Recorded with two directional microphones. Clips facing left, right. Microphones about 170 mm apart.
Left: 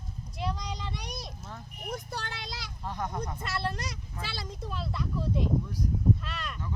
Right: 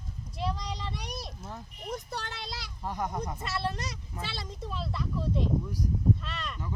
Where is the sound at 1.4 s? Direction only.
20° right (ahead or behind).